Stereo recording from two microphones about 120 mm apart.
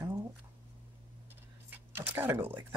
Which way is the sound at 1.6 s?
15° right (ahead or behind).